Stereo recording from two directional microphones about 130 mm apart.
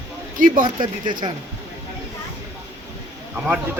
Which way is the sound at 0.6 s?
35° right (ahead or behind).